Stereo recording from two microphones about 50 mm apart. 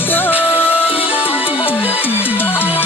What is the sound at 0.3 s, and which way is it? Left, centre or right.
Music, right.